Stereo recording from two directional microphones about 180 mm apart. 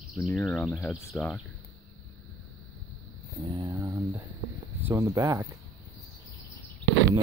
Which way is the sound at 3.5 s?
20° right (ahead or behind).